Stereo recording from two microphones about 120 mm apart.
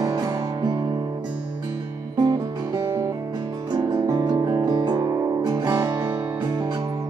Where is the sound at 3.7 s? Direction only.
35° right (ahead or behind).